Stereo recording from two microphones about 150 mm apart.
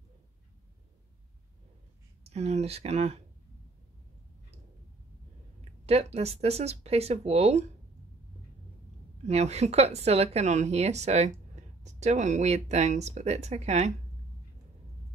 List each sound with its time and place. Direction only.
2.2 s a woman's voice: 45° right (ahead or behind)
5.9 s a woman's voice: 45° right (ahead or behind)
9.2 s a woman's voice: 45° right (ahead or behind)